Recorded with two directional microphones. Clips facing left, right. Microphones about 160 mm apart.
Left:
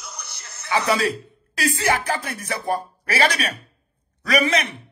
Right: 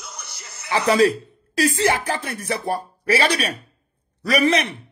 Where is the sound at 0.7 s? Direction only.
35° right (ahead or behind).